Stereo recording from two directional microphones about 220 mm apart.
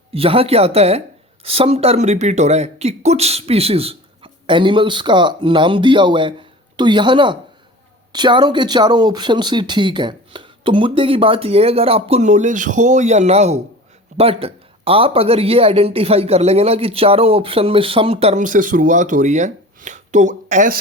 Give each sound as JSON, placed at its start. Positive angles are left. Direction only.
{"t": 0.1, "sound": "speech", "side_deg": -25}